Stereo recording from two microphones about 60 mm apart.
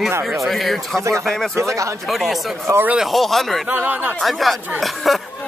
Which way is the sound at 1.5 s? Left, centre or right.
Right.